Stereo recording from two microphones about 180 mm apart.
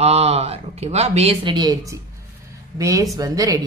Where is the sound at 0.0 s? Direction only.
35° right (ahead or behind).